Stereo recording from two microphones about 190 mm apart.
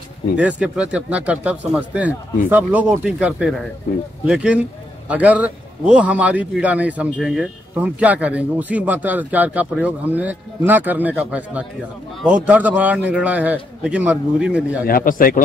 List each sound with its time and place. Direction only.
0.4 s speech: 5° right (ahead or behind)
14.9 s speech: 50° left (ahead or behind)